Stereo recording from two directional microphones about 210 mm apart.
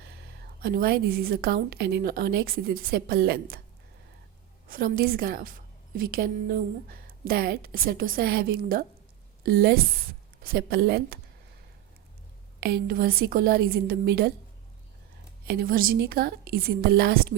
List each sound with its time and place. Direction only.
0.6 s a woman's voice: 45° right (ahead or behind)
4.7 s a woman's voice: 45° right (ahead or behind)
12.5 s a woman's voice: 50° right (ahead or behind)
15.4 s a woman's voice: 45° right (ahead or behind)